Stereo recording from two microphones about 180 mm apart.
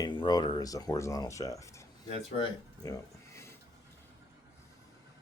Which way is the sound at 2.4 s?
20° left (ahead or behind).